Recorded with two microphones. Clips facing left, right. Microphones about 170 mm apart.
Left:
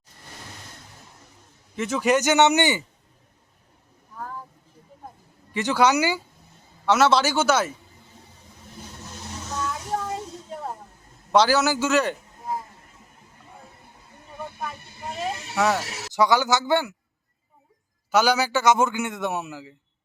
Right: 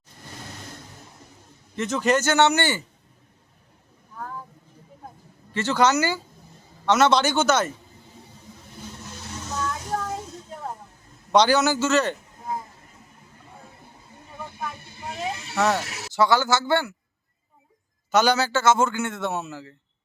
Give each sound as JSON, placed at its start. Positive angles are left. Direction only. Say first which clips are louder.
{"t": 1.7, "sound": "a man's voice", "louder": "left 1 dB", "side_deg": 10}
{"t": 5.5, "sound": "a man's voice", "louder": "even", "side_deg": 15}
{"t": 9.5, "sound": "music", "louder": "even", "side_deg": 5}
{"t": 11.3, "sound": "a man's voice", "louder": "right 1 dB", "side_deg": 5}
{"t": 14.6, "sound": "vehicle", "louder": "even", "side_deg": 0}
{"t": 16.1, "sound": "a man's voice", "louder": "even", "side_deg": 15}
{"t": 18.1, "sound": "a man's voice", "louder": "even", "side_deg": 10}